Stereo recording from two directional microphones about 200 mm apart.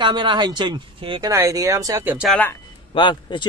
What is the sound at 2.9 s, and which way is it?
Speech, 25° left (ahead or behind).